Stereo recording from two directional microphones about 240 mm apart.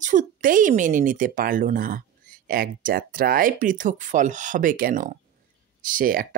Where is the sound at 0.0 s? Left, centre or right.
Right.